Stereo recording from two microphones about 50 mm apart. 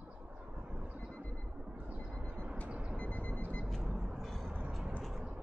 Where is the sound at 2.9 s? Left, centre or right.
Left.